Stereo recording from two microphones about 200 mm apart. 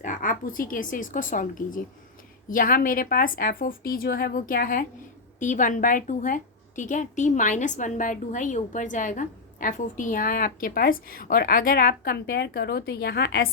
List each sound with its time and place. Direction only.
0.0 s a woman's voice: 40° left (ahead or behind)